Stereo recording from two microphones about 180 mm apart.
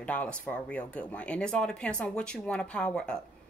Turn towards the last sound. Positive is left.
turn(degrees=5)  # may be behind; listen again after turning